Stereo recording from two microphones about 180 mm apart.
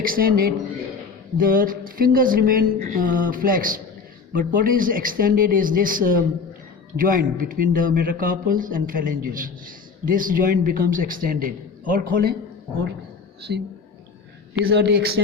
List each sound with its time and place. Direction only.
0.0 s a man's voice: 55° right (ahead or behind)
13.5 s speech: 75° right (ahead or behind)